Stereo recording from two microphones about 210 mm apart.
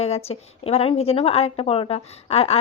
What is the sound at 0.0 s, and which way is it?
Speech, 30° left (ahead or behind).